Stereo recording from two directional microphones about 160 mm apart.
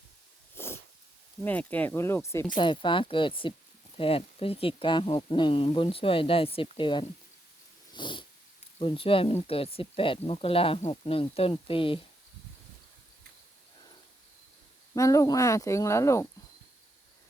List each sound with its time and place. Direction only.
0.5 s a sound: 15° left (ahead or behind)
1.5 s speech: 10° left (ahead or behind)
2.6 s speech: 30° left (ahead or behind)
7.9 s dog: 30° left (ahead or behind)
8.8 s speech: 35° left (ahead or behind)
14.9 s speech: 20° left (ahead or behind)